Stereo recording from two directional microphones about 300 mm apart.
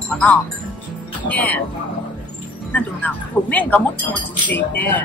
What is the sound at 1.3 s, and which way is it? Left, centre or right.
Speech, centre.